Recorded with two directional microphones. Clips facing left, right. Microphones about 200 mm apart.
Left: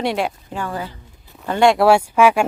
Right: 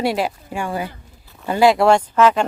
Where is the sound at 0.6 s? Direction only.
15° right (ahead or behind); by 2.4 s 10° left (ahead or behind).